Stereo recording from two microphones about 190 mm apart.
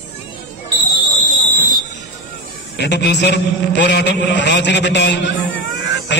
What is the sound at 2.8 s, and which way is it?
A man's voice, 65° left (ahead or behind).